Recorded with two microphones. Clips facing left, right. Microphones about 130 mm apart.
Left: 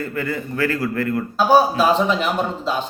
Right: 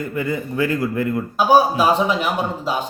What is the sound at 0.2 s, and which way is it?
A man's voice, 15° right (ahead or behind).